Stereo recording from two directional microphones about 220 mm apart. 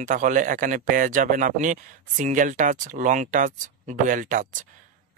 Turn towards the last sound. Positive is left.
turn(degrees=-35)  # may be behind; listen again after turning